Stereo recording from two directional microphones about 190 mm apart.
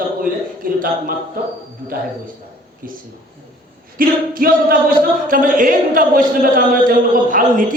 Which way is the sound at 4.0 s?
50° right (ahead or behind).